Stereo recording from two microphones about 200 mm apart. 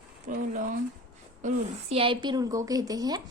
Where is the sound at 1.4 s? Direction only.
30° right (ahead or behind).